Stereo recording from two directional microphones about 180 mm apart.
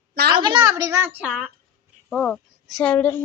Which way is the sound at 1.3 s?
Centre (ahead or behind).